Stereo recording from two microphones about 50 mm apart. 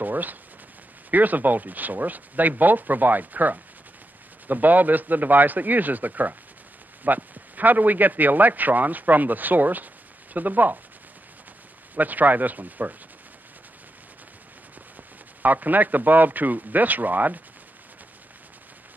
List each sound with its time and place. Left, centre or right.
0.0 s gunshot: right
1.1 s a man's voice: right
11.9 s a man's voice: right
15.4 s a man's voice: right